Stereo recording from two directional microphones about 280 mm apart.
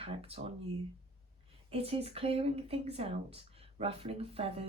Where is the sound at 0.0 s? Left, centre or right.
Right.